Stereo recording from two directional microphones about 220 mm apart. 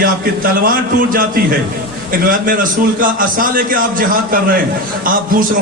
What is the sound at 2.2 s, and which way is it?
A man's voice, 40° right (ahead or behind).